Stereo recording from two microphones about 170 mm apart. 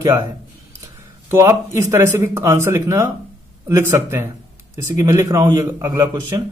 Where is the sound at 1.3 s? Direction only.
15° right (ahead or behind).